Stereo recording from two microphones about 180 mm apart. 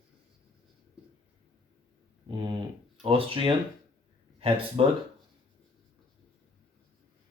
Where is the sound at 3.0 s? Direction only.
30° right (ahead or behind).